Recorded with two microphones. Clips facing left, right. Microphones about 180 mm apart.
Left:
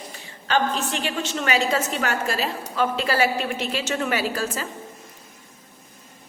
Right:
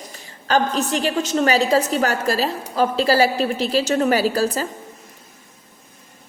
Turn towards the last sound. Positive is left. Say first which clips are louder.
# right 7 dB
turn(degrees=-35)  # may be behind; listen again after turning